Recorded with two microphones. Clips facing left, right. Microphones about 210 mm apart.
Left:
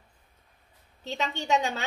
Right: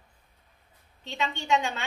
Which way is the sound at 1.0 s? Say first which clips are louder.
Left 1 dB; 40° left (ahead or behind).